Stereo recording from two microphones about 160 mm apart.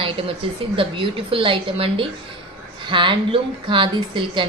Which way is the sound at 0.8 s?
35° right (ahead or behind).